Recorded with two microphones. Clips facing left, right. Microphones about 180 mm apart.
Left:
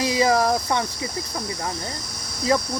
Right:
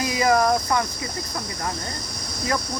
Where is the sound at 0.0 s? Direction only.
30° left (ahead or behind).